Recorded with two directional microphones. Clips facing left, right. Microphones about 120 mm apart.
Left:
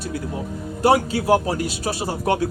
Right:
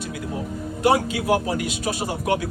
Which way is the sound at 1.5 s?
35° left (ahead or behind).